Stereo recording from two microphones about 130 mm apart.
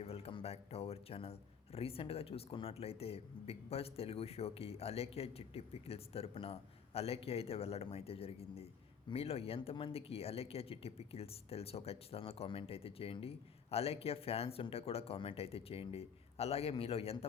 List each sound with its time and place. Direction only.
0.0 s a man's voice: 50° left (ahead or behind)